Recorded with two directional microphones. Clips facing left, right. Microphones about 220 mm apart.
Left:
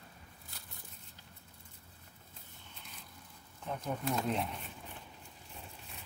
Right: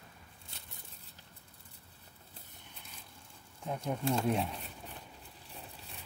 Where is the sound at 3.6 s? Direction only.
10° right (ahead or behind).